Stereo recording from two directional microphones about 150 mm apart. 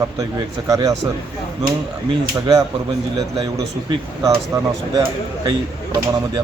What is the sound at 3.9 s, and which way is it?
Speech, 25° right (ahead or behind).